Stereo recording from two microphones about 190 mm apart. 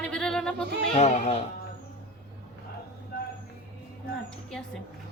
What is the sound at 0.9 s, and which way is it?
Speech, 35° left (ahead or behind).